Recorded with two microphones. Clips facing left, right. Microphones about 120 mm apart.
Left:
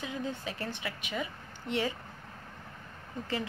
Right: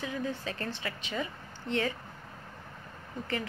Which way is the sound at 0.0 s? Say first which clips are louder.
Right 2 dB; 20° left (ahead or behind).